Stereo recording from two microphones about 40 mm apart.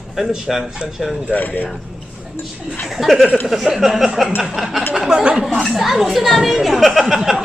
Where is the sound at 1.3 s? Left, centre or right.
Left.